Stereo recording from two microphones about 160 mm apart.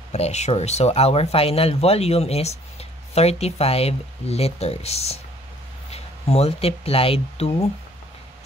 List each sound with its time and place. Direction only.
0.1 s speech: 45° left (ahead or behind)